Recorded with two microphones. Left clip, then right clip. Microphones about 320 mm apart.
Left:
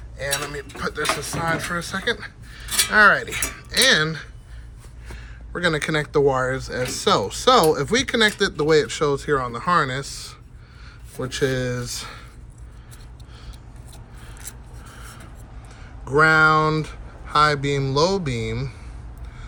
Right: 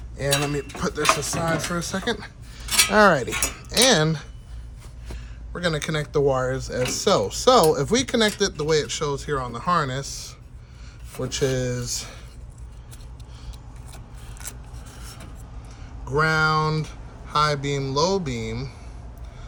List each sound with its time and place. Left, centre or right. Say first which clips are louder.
0.2 s speech: right 3 dB; right
2.6 s a sound: right 3 dB; centre
2.9 s speech: left 3 dB; right
5.0 s speech: left 3 dB; centre
14.4 s scissors: right 4 dB; centre
16.0 s speech: left 6 dB; centre